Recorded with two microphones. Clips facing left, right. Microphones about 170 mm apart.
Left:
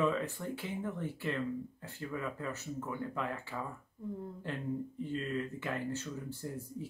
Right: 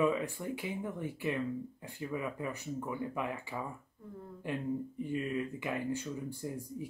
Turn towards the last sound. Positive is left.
turn(degrees=-15)  # may be behind; listen again after turning